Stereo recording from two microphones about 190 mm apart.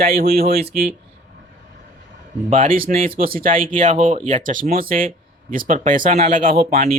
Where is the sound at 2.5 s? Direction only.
45° right (ahead or behind).